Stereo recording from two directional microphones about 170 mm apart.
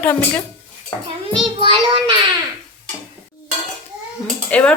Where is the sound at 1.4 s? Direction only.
30° right (ahead or behind).